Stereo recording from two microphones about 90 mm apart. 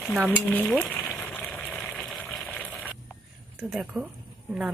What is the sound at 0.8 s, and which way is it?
Speech, 10° left (ahead or behind).